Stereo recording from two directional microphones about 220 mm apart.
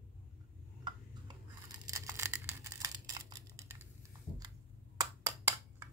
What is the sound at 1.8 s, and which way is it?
Tearing, 15° right (ahead or behind).